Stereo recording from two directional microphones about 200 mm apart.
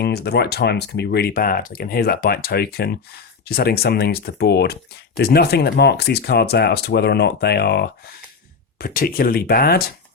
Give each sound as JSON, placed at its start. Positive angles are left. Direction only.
{"t": 0.0, "sound": "speech", "side_deg": 55}